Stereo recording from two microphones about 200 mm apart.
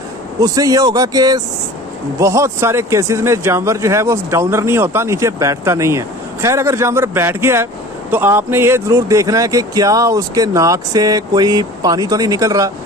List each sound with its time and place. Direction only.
0.3 s speech: 20° right (ahead or behind)